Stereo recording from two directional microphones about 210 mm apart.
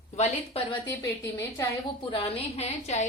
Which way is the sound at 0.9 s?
10° left (ahead or behind).